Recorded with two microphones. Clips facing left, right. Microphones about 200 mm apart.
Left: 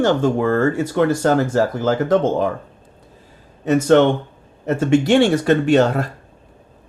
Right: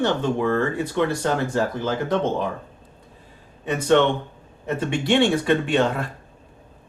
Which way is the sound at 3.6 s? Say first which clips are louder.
Left 5 dB; 45° left (ahead or behind).